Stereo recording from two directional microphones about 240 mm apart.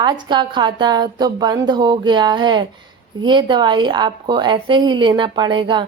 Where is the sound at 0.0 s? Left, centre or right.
Centre.